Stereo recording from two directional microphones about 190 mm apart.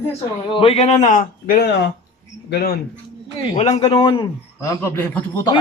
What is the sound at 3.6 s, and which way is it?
A man's voice, 30° left (ahead or behind).